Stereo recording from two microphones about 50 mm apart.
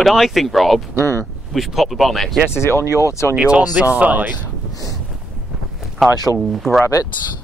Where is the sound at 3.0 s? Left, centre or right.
Left.